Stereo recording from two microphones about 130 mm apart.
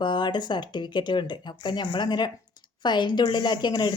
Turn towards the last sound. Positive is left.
turn(degrees=35)  # may be behind; listen again after turning